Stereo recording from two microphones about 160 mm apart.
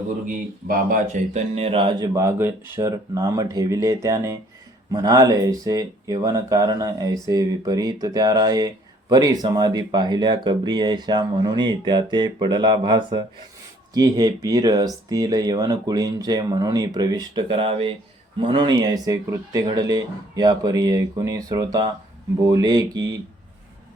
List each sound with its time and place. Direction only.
0.3 s speech: 55° right (ahead or behind); by 22.9 s 25° right (ahead or behind)